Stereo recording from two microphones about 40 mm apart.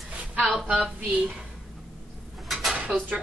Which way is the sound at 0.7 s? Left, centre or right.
Right.